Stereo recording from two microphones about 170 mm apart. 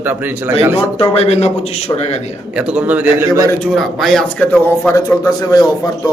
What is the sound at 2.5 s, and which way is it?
Speech, 5° right (ahead or behind).